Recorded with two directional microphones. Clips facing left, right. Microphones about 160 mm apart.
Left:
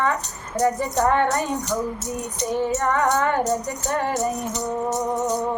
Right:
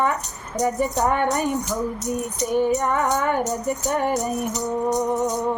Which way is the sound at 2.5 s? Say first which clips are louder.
Right 2 dB; 15° right (ahead or behind).